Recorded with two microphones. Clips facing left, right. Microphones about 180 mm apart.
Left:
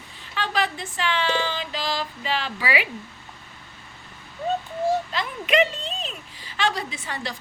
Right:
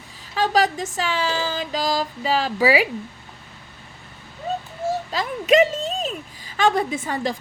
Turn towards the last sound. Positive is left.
turn(degrees=-45)  # may be behind; listen again after turning